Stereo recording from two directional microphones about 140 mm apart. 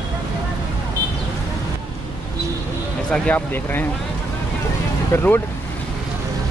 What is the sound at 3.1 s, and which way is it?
Speech, 10° left (ahead or behind).